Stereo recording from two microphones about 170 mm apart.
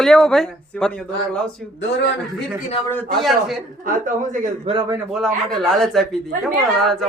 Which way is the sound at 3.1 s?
Centre (ahead or behind).